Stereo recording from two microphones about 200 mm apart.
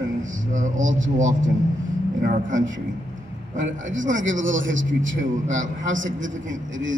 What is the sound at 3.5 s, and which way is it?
A man's voice, 70° right (ahead or behind).